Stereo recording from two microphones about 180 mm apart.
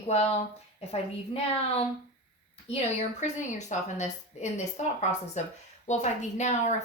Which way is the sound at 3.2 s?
40° left (ahead or behind).